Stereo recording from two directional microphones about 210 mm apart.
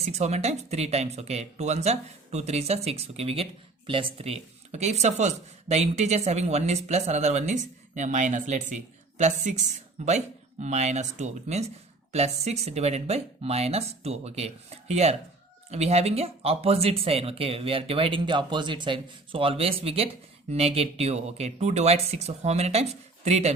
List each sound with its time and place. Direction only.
0.0 s speech: 30° right (ahead or behind)